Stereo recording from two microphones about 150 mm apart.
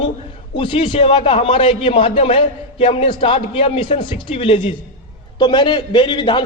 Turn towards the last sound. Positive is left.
turn(degrees=30)  # may be behind; listen again after turning